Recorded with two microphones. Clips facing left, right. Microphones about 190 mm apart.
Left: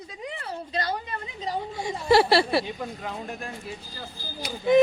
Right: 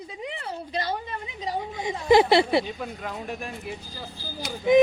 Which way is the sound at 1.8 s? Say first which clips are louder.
Right 2 dB; 20° right (ahead or behind).